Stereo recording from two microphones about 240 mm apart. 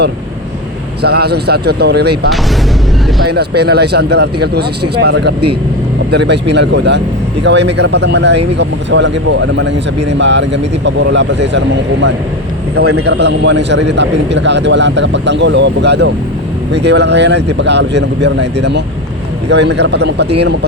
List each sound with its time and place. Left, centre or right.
1.0 s a man's voice: right
13.1 s a man's voice: right